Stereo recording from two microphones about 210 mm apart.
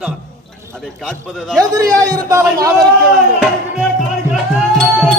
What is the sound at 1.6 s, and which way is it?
A man's voice, 15° right (ahead or behind).